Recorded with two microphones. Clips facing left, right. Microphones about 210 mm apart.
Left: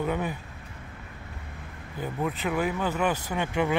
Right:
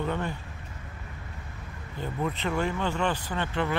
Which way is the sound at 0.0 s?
10° left (ahead or behind).